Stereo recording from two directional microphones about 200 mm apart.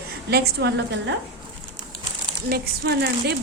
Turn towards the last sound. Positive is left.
turn(degrees=-50)  # may be behind; listen again after turning